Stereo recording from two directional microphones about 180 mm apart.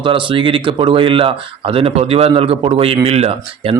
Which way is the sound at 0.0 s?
25° right (ahead or behind).